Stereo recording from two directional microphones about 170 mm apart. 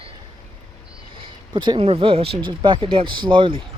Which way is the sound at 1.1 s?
30° right (ahead or behind).